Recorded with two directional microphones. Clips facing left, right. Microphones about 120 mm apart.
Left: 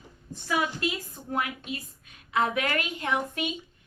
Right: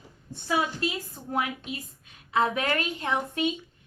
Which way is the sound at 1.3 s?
25° right (ahead or behind).